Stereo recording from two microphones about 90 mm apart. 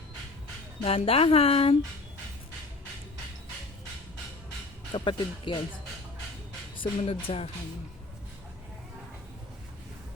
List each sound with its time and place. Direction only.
0.9 s speech: 90° left
4.9 s speech: 70° left (ahead or behind)
6.7 s music: 90° left